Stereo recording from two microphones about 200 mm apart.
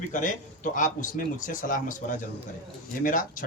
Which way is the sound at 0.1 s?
40° left (ahead or behind).